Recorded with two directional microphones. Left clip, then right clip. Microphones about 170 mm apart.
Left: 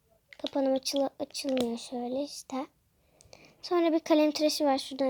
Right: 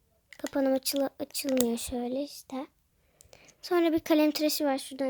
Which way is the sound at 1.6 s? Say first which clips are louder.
Right 3 dB; 45° right (ahead or behind).